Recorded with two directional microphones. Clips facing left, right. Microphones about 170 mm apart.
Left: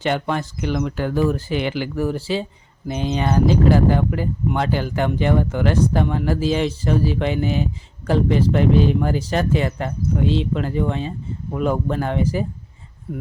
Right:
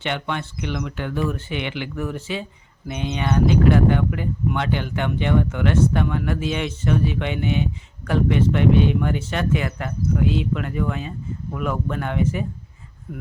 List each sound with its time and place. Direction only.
0.0 s speech: 40° left (ahead or behind)